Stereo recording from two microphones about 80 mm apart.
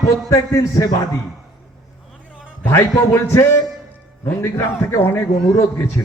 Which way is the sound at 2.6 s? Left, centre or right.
Left.